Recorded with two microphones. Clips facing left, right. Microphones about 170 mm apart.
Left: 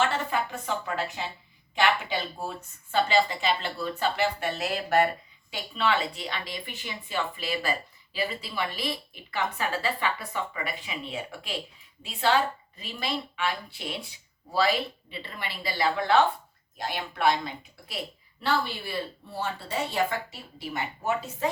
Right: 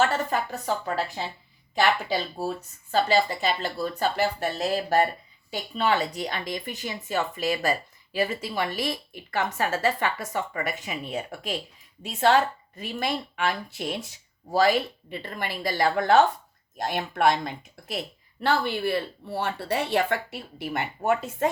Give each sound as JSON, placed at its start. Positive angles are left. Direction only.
{"t": 0.0, "sound": "a woman's voice", "side_deg": -40}
{"t": 18.4, "sound": "speech", "side_deg": -60}